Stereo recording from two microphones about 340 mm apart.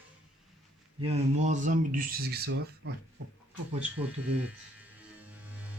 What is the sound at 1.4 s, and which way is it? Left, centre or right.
Speech, right.